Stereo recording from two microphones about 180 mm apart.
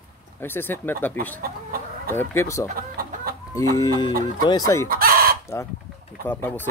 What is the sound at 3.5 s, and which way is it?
Speech, 20° left (ahead or behind).